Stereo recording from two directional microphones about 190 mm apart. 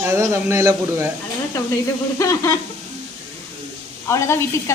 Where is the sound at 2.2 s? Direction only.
15° left (ahead or behind).